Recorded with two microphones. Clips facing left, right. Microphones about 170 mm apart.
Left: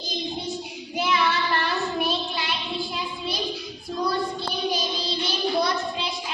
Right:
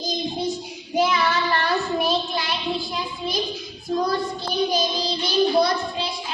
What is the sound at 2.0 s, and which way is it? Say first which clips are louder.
Child singing: right 4 dB; 40° right (ahead or behind).